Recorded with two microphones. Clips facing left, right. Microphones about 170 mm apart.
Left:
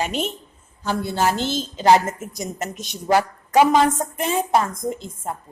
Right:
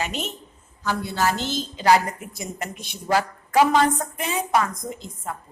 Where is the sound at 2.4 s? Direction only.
45° left (ahead or behind).